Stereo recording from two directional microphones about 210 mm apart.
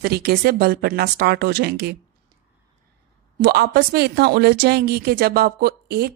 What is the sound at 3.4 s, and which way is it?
Speech, 50° right (ahead or behind).